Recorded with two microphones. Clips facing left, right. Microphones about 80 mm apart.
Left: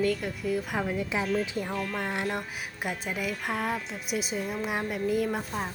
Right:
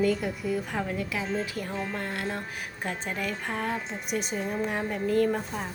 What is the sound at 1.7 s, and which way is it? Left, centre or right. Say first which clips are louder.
Speech: left 1 dB; right.